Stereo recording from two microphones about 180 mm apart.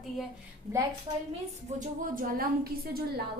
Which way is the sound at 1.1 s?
30° right (ahead or behind).